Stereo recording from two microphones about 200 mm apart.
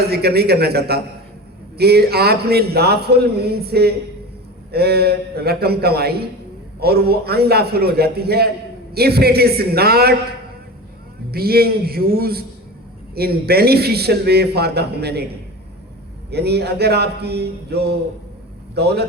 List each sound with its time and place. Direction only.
0.1 s a man's voice: 55° right (ahead or behind)
11.3 s a man's voice: 50° right (ahead or behind)
16.3 s speech: 55° right (ahead or behind)